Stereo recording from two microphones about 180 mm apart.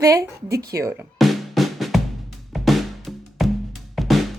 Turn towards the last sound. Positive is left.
turn(degrees=0)  # may be behind; listen again after turning